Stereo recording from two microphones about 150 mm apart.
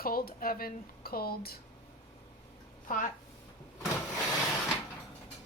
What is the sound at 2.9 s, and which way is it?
Speech, 65° left (ahead or behind).